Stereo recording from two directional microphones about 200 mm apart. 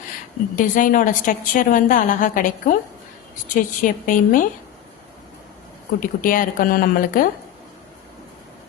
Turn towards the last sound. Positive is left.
turn(degrees=45)  # may be behind; listen again after turning